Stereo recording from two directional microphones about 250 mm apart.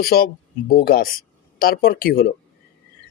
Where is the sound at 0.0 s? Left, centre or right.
Left.